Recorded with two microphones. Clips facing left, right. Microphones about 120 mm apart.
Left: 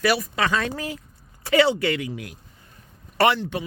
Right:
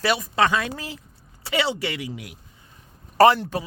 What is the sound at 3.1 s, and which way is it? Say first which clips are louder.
Speech: right 4 dB; 40° right (ahead or behind).